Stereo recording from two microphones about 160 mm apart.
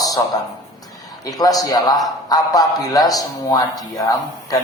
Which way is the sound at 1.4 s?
25° left (ahead or behind).